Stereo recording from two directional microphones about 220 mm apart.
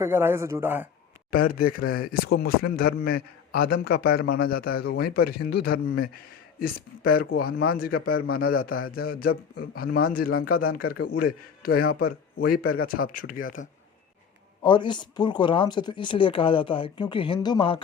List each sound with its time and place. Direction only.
0.0 s speech: 10° right (ahead or behind)
1.3 s speech: 40° left (ahead or behind)
14.6 s speech: 20° left (ahead or behind)